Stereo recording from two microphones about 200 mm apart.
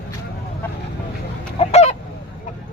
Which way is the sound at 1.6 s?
35° left (ahead or behind).